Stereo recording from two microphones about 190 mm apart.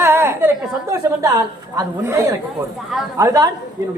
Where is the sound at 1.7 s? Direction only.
15° right (ahead or behind).